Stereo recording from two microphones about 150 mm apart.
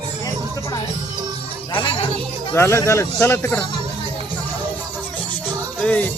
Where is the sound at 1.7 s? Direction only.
35° left (ahead or behind).